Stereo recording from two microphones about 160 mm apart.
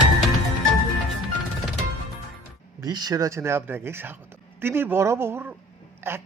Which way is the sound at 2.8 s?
25° right (ahead or behind).